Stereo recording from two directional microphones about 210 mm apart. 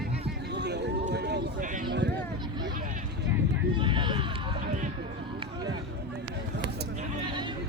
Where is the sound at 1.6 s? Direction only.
40° right (ahead or behind).